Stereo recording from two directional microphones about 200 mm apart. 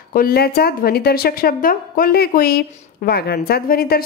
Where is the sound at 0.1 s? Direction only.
50° left (ahead or behind).